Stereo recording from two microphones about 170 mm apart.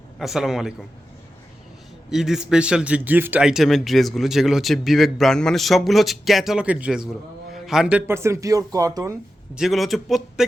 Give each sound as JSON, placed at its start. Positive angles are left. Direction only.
{"t": 0.2, "sound": "a man's voice", "side_deg": 0}
{"t": 2.0, "sound": "a man's voice", "side_deg": 0}
{"t": 9.6, "sound": "a man's voice", "side_deg": 0}